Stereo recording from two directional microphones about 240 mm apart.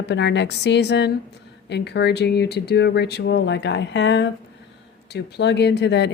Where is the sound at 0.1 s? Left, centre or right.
Left.